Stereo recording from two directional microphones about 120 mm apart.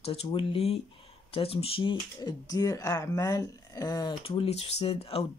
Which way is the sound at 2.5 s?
30° left (ahead or behind).